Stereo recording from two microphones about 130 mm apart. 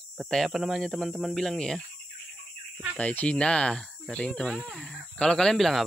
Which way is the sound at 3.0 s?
10° left (ahead or behind).